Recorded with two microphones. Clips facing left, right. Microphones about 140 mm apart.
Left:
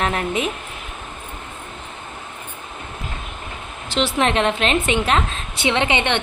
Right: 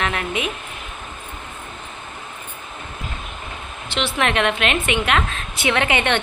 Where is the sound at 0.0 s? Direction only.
35° left (ahead or behind).